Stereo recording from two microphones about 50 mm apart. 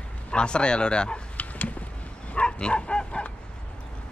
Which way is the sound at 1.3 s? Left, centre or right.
Left.